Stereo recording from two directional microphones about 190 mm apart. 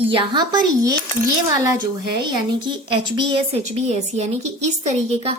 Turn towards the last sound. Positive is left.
turn(degrees=-35)  # may be behind; listen again after turning